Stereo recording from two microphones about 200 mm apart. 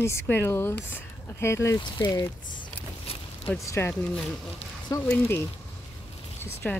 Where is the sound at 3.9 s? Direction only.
5° left (ahead or behind).